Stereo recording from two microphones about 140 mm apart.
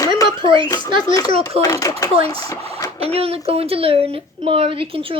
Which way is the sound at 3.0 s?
45° right (ahead or behind).